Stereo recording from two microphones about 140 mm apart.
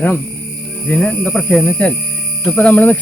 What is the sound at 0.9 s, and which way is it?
Speech, 10° left (ahead or behind).